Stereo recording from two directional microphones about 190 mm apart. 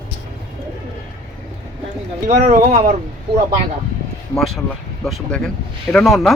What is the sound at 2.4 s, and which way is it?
Speech, 40° right (ahead or behind).